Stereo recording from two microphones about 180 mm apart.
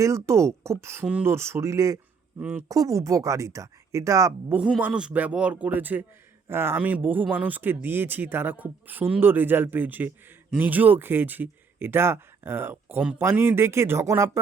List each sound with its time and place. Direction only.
0.0 s speech: 15° right (ahead or behind)